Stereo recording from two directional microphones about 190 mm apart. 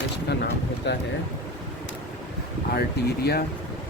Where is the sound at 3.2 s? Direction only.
55° left (ahead or behind).